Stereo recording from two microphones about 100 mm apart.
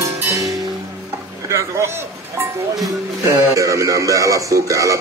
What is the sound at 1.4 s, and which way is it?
Speech, 30° right (ahead or behind).